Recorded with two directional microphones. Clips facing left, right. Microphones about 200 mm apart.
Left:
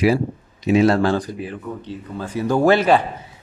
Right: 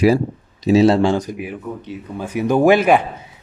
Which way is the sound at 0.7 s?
25° right (ahead or behind).